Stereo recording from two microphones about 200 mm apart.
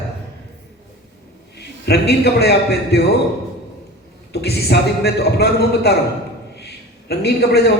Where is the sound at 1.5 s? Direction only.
55° left (ahead or behind).